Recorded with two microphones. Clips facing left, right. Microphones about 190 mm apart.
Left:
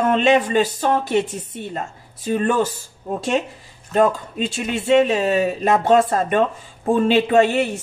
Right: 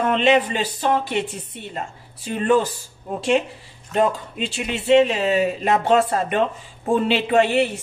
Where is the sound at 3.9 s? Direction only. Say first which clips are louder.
Left 3 dB; 45° left (ahead or behind).